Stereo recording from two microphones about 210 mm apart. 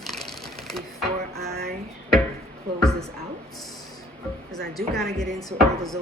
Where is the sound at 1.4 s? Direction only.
50° right (ahead or behind).